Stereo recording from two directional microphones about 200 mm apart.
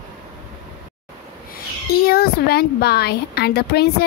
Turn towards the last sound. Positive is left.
turn(degrees=55)  # may be behind; listen again after turning